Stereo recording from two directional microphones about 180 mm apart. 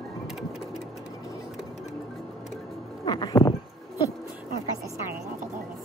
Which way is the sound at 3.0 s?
25° left (ahead or behind).